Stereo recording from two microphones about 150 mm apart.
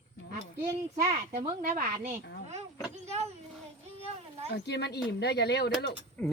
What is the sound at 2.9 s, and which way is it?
Speech, 50° right (ahead or behind).